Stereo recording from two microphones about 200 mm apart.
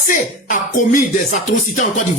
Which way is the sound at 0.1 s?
40° left (ahead or behind).